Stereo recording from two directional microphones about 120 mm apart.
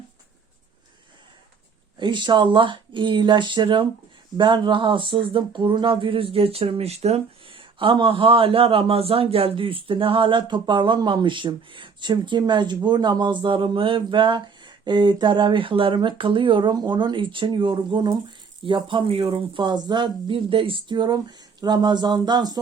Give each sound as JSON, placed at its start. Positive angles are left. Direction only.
{"t": 2.0, "sound": "speech", "side_deg": -40}